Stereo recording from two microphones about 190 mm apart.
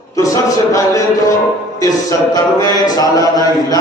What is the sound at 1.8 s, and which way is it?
Speech, 20° left (ahead or behind).